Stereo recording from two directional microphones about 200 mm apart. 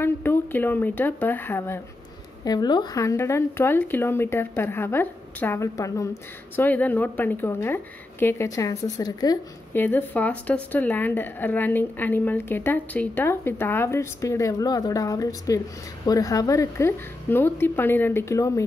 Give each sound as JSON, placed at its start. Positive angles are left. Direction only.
{"t": 0.0, "sound": "a woman's voice", "side_deg": 10}